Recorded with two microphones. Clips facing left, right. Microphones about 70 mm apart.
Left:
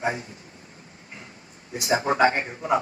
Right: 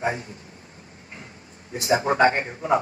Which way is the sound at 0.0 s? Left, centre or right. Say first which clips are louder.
Right 1 dB; right.